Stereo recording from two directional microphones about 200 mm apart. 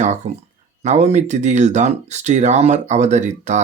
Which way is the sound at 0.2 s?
35° right (ahead or behind).